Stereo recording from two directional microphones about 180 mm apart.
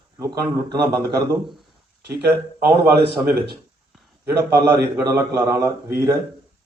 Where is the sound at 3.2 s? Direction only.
60° right (ahead or behind).